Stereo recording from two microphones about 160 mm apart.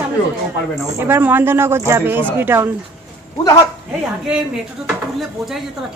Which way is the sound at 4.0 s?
5° right (ahead or behind).